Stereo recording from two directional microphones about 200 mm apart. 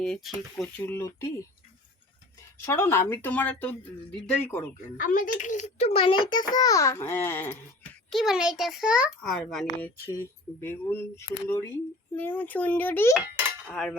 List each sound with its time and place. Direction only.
0.0 s a child's voice: centre (ahead or behind)
2.6 s speech: 15° left (ahead or behind)
4.9 s a child's voice: 40° left (ahead or behind); by 7.6 s 10° left (ahead or behind)
8.1 s a child's voice: centre (ahead or behind)
9.8 s speech: 10° left (ahead or behind)
13.8 s a child's voice: centre (ahead or behind)